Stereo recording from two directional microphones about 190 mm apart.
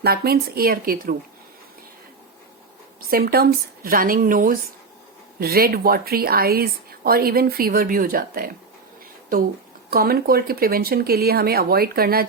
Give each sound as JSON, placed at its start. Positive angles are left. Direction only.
{"t": 0.0, "sound": "speech", "side_deg": -55}
{"t": 3.1, "sound": "speech", "side_deg": -50}
{"t": 9.9, "sound": "speech", "side_deg": -50}